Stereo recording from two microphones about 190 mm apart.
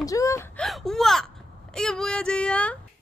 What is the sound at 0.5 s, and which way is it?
A woman's voice, centre (ahead or behind).